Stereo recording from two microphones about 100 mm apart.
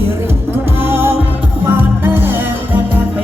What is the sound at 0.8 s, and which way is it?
Music, 25° right (ahead or behind).